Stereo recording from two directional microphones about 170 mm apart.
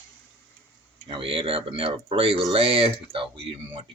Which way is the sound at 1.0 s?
30° right (ahead or behind).